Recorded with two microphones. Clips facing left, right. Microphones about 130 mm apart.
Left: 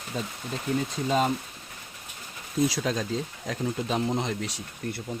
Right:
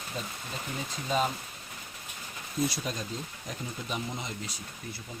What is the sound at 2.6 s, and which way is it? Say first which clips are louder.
Speech: left 6 dB; 90° left.